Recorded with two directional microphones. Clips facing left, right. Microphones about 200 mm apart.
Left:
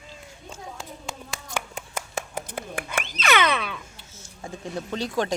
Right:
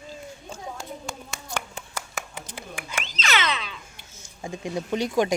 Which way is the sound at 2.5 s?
55° left (ahead or behind).